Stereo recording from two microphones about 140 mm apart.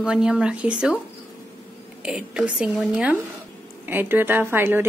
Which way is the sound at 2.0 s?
5° right (ahead or behind).